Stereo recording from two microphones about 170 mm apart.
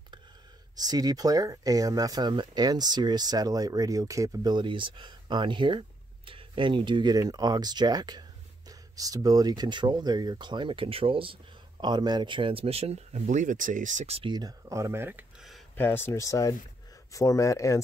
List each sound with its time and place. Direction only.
0.7 s speech: 20° right (ahead or behind)
15.7 s speech: 10° left (ahead or behind)